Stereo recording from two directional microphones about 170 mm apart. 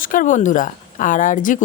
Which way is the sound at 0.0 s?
50° left (ahead or behind).